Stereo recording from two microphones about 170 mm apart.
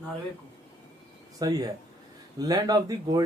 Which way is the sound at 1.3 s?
20° right (ahead or behind).